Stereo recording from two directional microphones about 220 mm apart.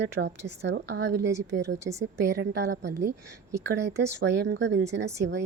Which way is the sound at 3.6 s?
50° right (ahead or behind).